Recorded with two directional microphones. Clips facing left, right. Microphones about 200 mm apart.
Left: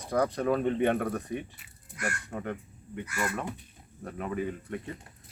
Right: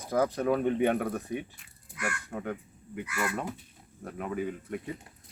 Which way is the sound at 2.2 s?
Centre (ahead or behind).